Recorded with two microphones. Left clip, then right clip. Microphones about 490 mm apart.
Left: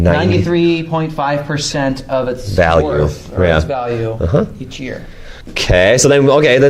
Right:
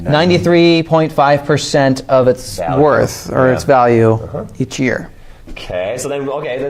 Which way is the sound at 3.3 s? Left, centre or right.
Right.